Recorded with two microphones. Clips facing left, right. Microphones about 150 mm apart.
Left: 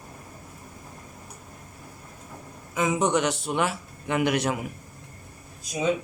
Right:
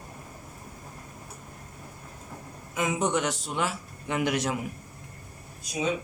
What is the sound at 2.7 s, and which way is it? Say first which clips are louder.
A man's voice: left 3 dB; 90° left.